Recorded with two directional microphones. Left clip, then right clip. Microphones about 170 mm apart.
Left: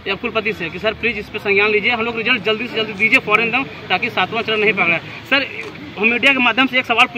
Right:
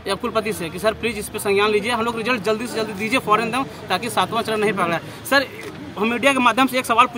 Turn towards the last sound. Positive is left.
turn(degrees=-20)  # may be behind; listen again after turning